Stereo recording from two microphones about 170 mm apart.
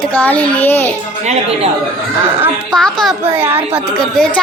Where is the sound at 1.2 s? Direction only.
40° right (ahead or behind).